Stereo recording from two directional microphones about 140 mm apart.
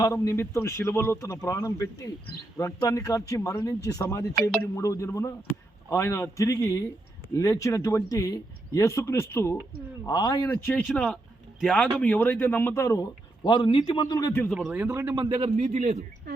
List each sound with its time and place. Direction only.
0.0 s speech: 20° left (ahead or behind)
10.1 s speech: 30° left (ahead or behind)
10.5 s speech: 10° left (ahead or behind)
13.4 s a man's voice: 35° left (ahead or behind)
14.5 s speech: 5° right (ahead or behind)
15.1 s a man's voice: 30° right (ahead or behind)
15.5 s a man's voice: 55° right (ahead or behind)